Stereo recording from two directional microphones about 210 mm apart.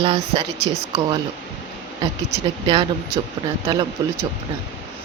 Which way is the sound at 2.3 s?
25° right (ahead or behind).